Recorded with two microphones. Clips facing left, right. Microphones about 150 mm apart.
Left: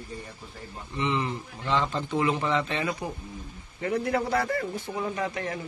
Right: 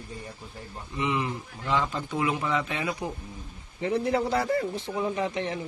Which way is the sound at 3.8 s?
25° right (ahead or behind).